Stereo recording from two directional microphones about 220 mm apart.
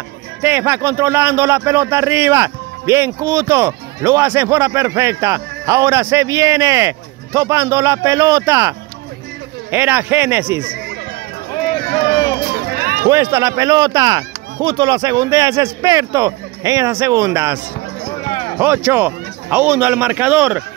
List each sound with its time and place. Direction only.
0.4 s speech: 10° right (ahead or behind)
12.7 s run: 45° right (ahead or behind)
13.1 s speech: 15° right (ahead or behind)
18.6 s speech: 10° right (ahead or behind)